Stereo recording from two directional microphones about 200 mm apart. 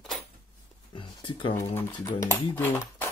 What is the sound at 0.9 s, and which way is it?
Speech, 25° left (ahead or behind).